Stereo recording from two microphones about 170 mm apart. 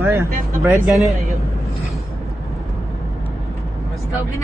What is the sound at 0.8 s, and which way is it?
Speech, centre (ahead or behind).